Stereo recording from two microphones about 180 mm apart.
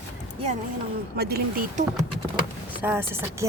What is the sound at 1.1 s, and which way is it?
Speech, 60° right (ahead or behind).